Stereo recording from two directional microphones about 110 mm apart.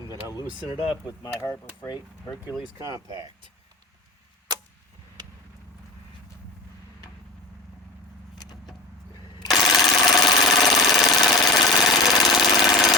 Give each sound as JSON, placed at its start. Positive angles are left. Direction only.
{"t": 0.9, "sound": "speech", "side_deg": 35}
{"t": 2.7, "sound": "speech", "side_deg": -30}
{"t": 9.5, "sound": "jackhammer", "side_deg": 0}